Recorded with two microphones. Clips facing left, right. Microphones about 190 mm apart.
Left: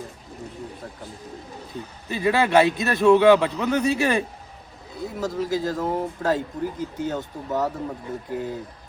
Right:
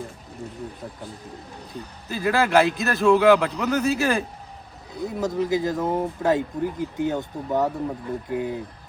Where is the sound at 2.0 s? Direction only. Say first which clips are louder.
Left 1 dB; centre (ahead or behind).